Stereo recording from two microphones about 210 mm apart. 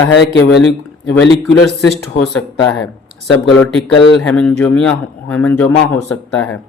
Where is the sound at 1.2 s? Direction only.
Centre (ahead or behind).